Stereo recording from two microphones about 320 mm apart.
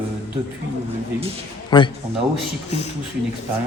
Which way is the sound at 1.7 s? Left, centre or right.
Centre.